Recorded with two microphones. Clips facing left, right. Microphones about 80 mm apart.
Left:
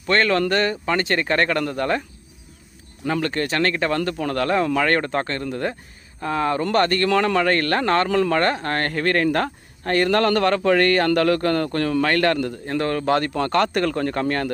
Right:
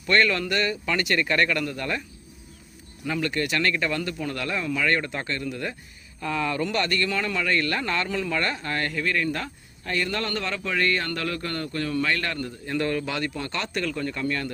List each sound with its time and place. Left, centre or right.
0.1 s speech: left
3.1 s speech: left
7.1 s speech: left
12.6 s speech: left
13.3 s speech: left